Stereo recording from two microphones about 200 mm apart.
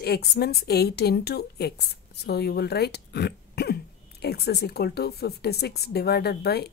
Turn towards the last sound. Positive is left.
turn(degrees=55)  # may be behind; listen again after turning